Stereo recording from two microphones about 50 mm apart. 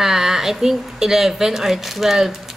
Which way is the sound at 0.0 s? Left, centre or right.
Centre.